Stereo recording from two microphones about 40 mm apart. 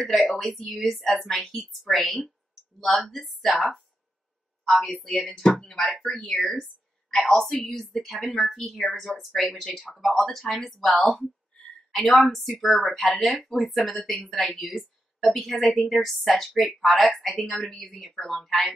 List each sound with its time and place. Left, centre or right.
0.0 s a woman's voice: centre
4.8 s a woman's voice: centre
9.3 s a woman's voice: centre